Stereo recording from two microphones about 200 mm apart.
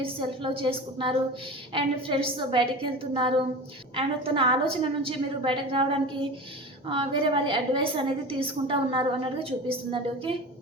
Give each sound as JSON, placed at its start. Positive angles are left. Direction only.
{"t": 0.0, "sound": "a woman's voice", "side_deg": -25}